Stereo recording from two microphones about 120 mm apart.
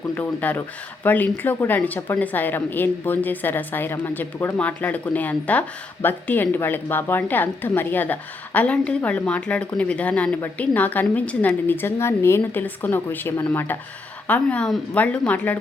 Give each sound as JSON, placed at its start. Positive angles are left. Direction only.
{"t": 0.1, "sound": "speech", "side_deg": 15}